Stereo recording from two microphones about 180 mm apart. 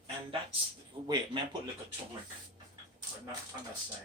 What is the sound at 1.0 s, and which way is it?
Speech, 25° right (ahead or behind).